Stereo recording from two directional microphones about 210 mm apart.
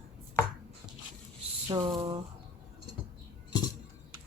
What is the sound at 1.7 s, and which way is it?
Speech, 20° right (ahead or behind).